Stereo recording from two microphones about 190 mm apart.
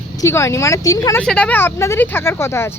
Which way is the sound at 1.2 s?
5° left (ahead or behind).